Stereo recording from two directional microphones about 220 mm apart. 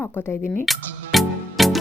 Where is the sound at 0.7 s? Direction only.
Centre (ahead or behind).